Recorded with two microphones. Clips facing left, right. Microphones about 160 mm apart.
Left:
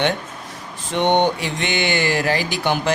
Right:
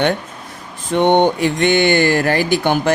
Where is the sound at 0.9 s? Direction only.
50° right (ahead or behind).